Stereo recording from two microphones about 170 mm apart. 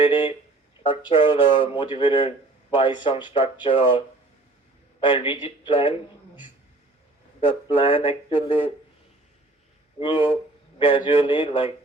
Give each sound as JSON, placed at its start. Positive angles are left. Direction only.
{"t": 0.0, "sound": "a sound", "side_deg": 30}
{"t": 0.8, "sound": "speech", "side_deg": 30}
{"t": 7.4, "sound": "speech", "side_deg": 35}
{"t": 10.0, "sound": "speech", "side_deg": 30}